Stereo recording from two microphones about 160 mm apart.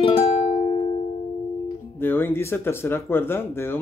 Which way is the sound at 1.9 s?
15° left (ahead or behind).